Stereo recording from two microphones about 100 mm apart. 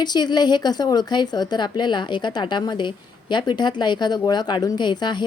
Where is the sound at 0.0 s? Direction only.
45° left (ahead or behind).